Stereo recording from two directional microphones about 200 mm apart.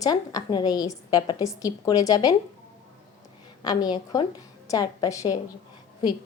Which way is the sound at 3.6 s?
20° left (ahead or behind).